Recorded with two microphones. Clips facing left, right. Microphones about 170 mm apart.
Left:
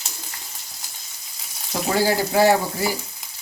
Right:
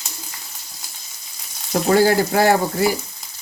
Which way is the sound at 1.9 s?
55° right (ahead or behind).